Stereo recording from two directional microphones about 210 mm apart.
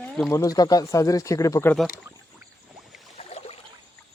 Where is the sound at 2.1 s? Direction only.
10° right (ahead or behind).